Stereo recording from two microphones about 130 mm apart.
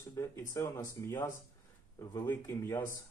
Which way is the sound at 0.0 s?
25° left (ahead or behind).